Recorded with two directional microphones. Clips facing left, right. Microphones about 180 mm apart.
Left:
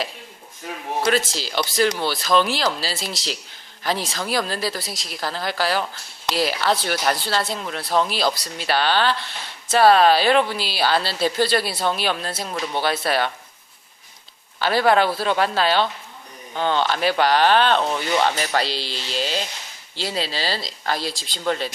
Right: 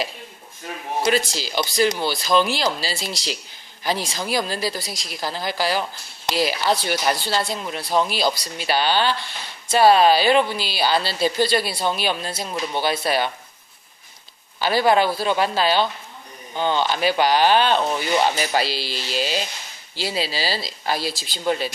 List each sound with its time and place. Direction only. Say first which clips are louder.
1.0 s speech: even; centre (ahead or behind)
14.6 s speech: even; centre (ahead or behind)